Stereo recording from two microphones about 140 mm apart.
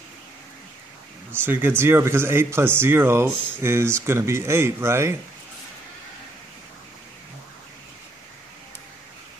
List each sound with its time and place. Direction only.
1.3 s speech: 15° right (ahead or behind)